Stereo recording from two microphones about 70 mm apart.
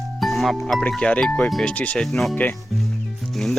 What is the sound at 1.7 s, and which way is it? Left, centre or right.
Speech, left.